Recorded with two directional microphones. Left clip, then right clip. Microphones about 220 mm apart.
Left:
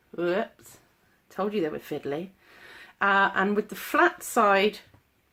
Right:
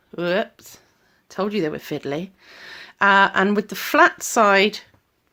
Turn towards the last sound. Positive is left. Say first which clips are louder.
# right 6 dB
turn(degrees=-40)  # may be behind; listen again after turning